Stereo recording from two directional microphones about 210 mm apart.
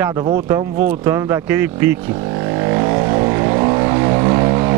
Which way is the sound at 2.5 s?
15° right (ahead or behind).